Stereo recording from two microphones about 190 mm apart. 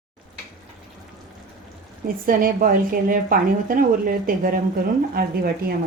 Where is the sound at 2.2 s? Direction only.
50° right (ahead or behind).